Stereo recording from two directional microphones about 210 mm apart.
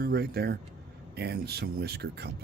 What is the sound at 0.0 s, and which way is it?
Speech, 45° right (ahead or behind).